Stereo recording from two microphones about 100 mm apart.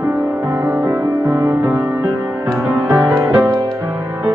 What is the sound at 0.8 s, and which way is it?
Music, 45° right (ahead or behind).